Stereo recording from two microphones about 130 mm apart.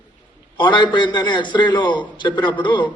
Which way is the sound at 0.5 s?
35° left (ahead or behind).